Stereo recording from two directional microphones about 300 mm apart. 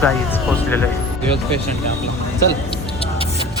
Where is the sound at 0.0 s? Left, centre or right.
Centre.